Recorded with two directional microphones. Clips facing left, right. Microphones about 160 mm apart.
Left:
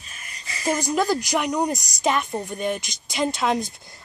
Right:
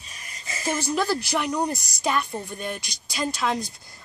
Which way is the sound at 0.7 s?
15° left (ahead or behind).